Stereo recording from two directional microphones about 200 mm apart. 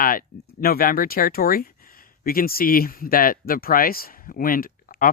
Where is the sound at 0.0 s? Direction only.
45° left (ahead or behind).